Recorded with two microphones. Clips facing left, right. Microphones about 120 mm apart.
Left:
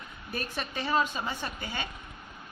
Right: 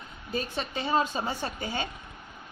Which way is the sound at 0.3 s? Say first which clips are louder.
Right 4 dB; 20° right (ahead or behind).